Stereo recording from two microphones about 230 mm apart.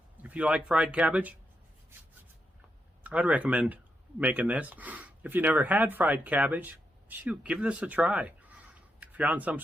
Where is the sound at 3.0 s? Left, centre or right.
Centre.